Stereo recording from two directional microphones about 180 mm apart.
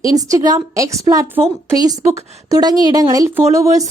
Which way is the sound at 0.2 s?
20° right (ahead or behind).